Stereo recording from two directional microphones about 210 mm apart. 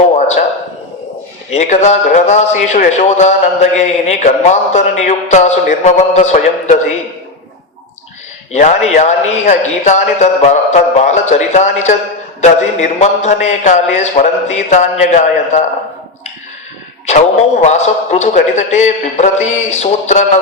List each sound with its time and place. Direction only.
1.5 s a man's voice: 30° left (ahead or behind)
8.5 s a man's voice: 35° left (ahead or behind)
17.1 s a man's voice: 35° left (ahead or behind)